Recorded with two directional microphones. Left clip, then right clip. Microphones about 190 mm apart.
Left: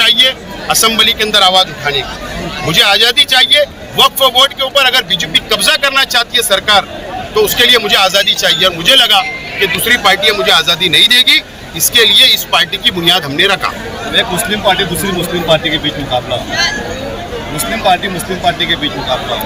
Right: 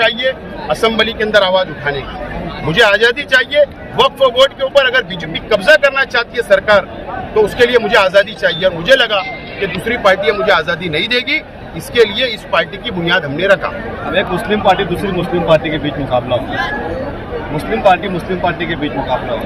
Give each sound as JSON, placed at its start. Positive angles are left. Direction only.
{"t": 0.0, "sound": "speech", "side_deg": 0}
{"t": 14.1, "sound": "speech", "side_deg": -45}
{"t": 18.4, "sound": "speech", "side_deg": -45}